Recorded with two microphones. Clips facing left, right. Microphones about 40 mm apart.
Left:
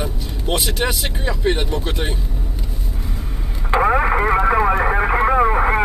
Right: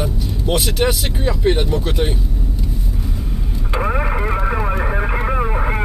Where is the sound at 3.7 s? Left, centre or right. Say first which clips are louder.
Left 5 dB; left.